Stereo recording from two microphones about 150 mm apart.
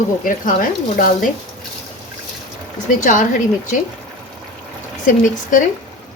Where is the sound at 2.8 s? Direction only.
60° left (ahead or behind).